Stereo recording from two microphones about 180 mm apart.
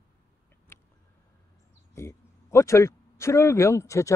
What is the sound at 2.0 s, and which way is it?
Speech, 15° left (ahead or behind).